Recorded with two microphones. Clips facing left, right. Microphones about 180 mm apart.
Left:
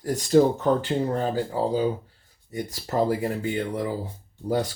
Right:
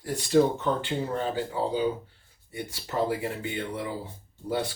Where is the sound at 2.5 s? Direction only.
40° left (ahead or behind).